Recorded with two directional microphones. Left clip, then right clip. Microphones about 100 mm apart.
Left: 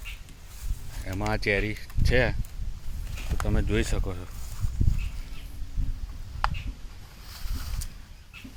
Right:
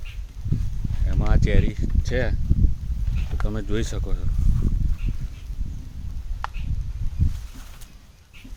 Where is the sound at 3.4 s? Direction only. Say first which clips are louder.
Even; 20° right (ahead or behind).